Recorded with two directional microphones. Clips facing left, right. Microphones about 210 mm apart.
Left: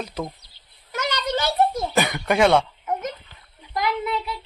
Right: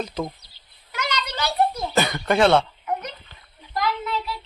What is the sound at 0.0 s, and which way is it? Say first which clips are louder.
Speech: right 2 dB; 10° left (ahead or behind).